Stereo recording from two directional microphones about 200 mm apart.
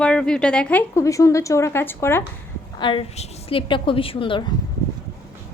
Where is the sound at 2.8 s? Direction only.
25° left (ahead or behind).